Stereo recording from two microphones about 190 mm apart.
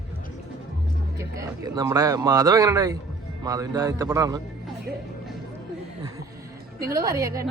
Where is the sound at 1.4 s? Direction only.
15° right (ahead or behind).